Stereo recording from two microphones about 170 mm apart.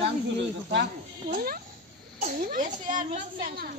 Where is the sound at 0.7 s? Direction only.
70° right (ahead or behind); by 3.7 s 55° right (ahead or behind).